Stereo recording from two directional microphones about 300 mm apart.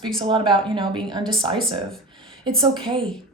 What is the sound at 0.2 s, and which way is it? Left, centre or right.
A woman's voice, centre.